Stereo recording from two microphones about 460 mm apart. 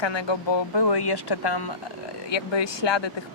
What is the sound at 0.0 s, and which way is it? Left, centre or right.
Speech, left.